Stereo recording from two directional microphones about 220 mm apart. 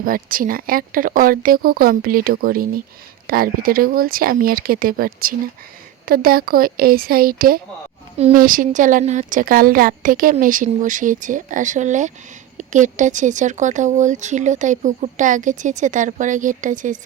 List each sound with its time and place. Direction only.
0.0 s speech: 40° right (ahead or behind)